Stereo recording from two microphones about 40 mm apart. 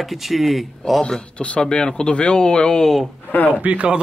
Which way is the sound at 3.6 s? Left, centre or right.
Right.